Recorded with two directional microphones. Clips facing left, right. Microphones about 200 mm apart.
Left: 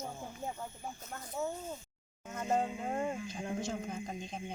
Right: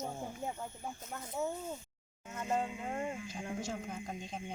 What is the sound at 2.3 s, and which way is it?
Speech, 40° left (ahead or behind).